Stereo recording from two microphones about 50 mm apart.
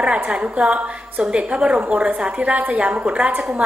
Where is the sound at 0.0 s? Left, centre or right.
Right.